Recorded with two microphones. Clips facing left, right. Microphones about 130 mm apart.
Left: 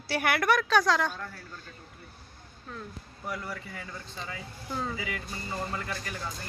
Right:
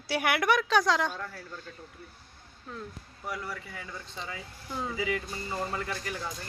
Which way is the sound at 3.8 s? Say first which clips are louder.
Even; 15° right (ahead or behind).